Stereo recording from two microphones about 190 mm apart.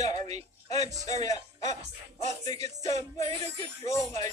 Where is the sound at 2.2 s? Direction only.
35° right (ahead or behind).